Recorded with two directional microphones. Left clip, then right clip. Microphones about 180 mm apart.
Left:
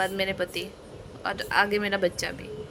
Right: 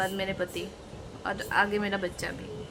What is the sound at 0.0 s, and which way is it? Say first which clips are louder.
Speech: left 3 dB; 35° left (ahead or behind).